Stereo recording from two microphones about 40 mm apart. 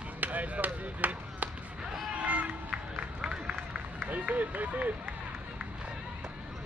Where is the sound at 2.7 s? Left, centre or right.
Centre.